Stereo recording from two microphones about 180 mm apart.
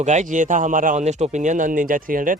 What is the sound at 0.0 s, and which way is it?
Speech, 40° right (ahead or behind).